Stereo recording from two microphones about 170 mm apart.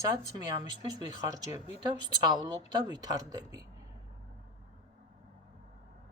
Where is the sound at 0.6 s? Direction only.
25° right (ahead or behind).